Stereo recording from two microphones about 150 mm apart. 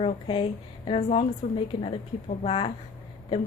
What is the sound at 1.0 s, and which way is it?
Speech, 45° left (ahead or behind).